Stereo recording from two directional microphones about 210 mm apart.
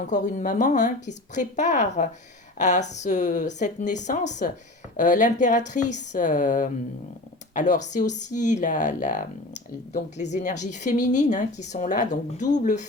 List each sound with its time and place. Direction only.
0.1 s a woman's voice: 35° left (ahead or behind)